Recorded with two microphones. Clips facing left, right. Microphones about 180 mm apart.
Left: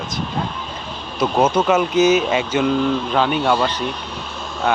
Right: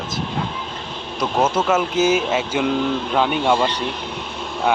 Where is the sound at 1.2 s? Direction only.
Centre (ahead or behind).